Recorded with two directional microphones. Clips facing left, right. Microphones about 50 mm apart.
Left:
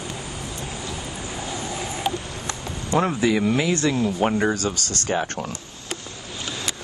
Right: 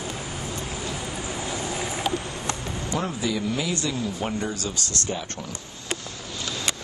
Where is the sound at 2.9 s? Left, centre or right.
Left.